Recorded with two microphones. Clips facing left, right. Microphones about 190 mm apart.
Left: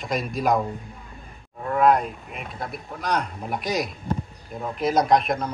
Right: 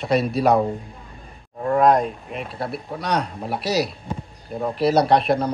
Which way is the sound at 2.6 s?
30° right (ahead or behind).